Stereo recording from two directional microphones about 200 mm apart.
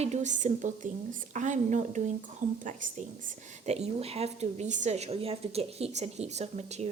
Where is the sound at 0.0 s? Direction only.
35° right (ahead or behind).